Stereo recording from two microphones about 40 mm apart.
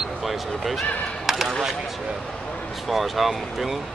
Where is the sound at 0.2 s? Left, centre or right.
Centre.